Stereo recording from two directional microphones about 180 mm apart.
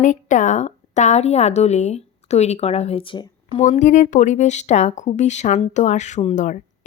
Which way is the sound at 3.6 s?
40° left (ahead or behind).